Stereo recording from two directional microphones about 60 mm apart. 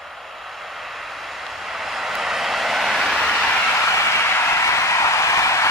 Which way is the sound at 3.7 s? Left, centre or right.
Left.